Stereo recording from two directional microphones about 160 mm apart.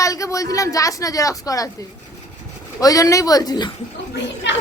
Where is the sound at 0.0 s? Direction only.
20° left (ahead or behind).